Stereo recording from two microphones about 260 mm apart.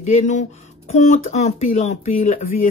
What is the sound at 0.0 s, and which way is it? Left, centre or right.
A woman's voice, left.